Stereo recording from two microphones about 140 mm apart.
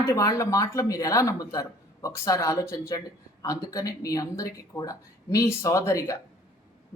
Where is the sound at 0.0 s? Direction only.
25° left (ahead or behind).